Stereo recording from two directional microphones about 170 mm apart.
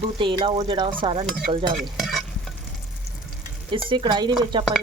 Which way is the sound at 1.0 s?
30° right (ahead or behind).